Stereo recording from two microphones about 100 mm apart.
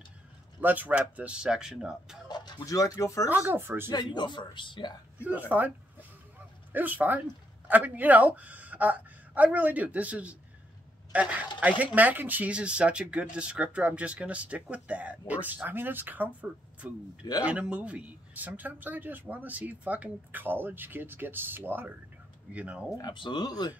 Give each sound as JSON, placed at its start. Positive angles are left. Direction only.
{"t": 0.6, "sound": "speech", "side_deg": -15}
{"t": 2.2, "sound": "speech", "side_deg": 45}
{"t": 3.3, "sound": "speech", "side_deg": -20}
{"t": 3.9, "sound": "a man's voice", "side_deg": 50}
{"t": 5.5, "sound": "speech", "side_deg": -15}
{"t": 6.7, "sound": "speech", "side_deg": -15}
{"t": 23.0, "sound": "a man's voice", "side_deg": 50}